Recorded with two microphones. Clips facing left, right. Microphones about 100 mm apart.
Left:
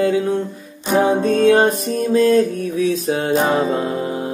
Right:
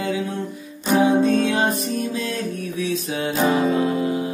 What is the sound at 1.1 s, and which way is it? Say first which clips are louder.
Music: left 4 dB; 45° left (ahead or behind).